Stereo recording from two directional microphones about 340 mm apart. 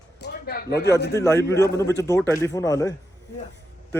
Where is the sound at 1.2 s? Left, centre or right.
Centre.